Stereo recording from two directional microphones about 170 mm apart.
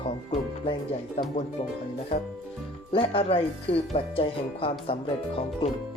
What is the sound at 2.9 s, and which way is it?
Speech, 35° left (ahead or behind).